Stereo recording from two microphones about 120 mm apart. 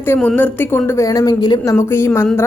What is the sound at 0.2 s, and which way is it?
A woman's voice, 10° left (ahead or behind).